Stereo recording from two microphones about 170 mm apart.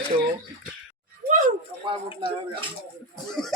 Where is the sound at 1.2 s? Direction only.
50° right (ahead or behind).